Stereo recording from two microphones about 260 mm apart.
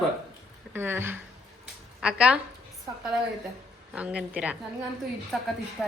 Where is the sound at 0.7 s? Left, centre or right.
Centre.